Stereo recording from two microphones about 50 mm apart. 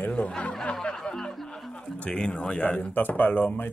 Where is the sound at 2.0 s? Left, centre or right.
Centre.